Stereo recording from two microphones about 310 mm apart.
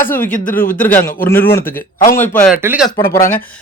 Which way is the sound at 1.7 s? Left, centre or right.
Left.